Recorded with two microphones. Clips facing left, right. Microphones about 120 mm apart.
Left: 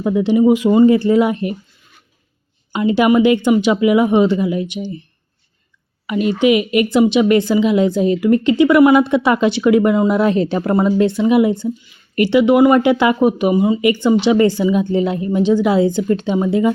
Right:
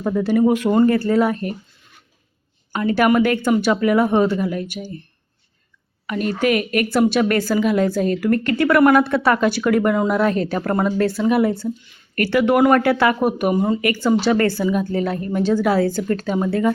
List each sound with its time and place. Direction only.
0.1 s speech: 20° left (ahead or behind)
3.0 s speech: 20° left (ahead or behind)
6.1 s speech: 15° left (ahead or behind)
13.8 s speech: 20° left (ahead or behind)